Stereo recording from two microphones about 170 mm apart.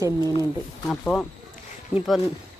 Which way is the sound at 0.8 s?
5° left (ahead or behind).